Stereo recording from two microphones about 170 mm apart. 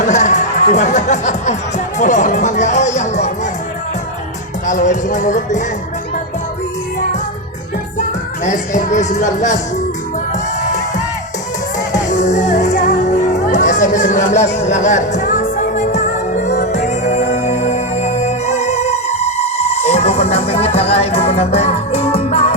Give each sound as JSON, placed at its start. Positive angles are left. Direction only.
{"t": 0.0, "sound": "speech", "side_deg": 45}
{"t": 4.6, "sound": "speech", "side_deg": 45}
{"t": 8.4, "sound": "speech", "side_deg": 45}
{"t": 10.7, "sound": "music", "side_deg": 45}
{"t": 12.0, "sound": "music", "side_deg": 45}